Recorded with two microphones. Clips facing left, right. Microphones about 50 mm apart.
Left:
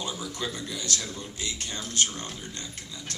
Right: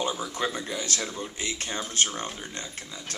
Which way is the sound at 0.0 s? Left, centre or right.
Right.